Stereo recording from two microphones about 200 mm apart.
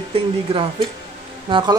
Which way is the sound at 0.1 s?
30° right (ahead or behind).